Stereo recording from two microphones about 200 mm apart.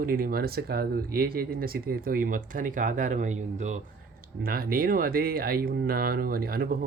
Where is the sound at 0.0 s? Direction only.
45° right (ahead or behind).